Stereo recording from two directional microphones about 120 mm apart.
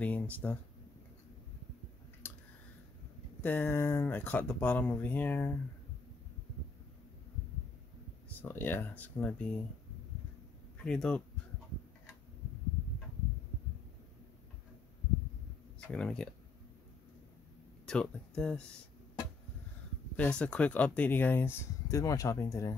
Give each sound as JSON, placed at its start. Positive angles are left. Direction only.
{"t": 0.0, "sound": "speech", "side_deg": 15}
{"t": 2.2, "sound": "a sound", "side_deg": 20}
{"t": 3.3, "sound": "speech", "side_deg": 15}
{"t": 8.4, "sound": "speech", "side_deg": 15}
{"t": 10.8, "sound": "speech", "side_deg": 5}
{"t": 15.9, "sound": "speech", "side_deg": 5}
{"t": 17.8, "sound": "speech", "side_deg": 5}
{"t": 20.2, "sound": "speech", "side_deg": 10}